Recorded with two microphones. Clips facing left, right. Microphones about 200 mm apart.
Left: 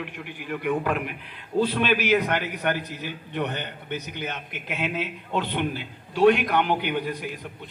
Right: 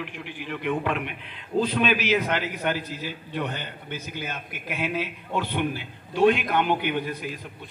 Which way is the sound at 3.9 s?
20° left (ahead or behind).